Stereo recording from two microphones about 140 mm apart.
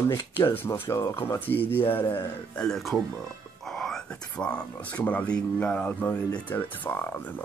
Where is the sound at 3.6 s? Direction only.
5° left (ahead or behind).